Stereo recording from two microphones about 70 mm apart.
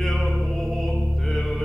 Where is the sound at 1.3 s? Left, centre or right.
Centre.